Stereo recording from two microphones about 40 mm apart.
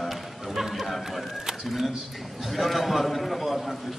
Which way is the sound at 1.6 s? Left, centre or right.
Centre.